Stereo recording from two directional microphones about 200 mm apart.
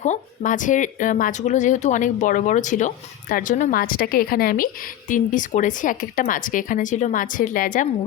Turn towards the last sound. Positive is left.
turn(degrees=45)  # may be behind; listen again after turning